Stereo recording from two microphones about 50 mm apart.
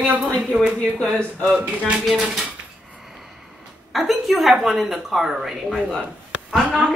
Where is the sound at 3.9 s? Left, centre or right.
Centre.